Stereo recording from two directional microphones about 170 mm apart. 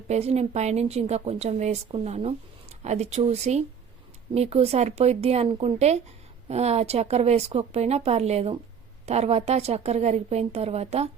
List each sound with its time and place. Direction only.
0.1 s a woman's voice: 40° right (ahead or behind)